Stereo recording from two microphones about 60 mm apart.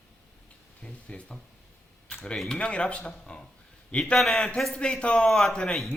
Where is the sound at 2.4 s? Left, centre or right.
Centre.